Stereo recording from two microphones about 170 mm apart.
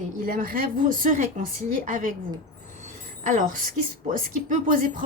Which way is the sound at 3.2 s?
50° right (ahead or behind).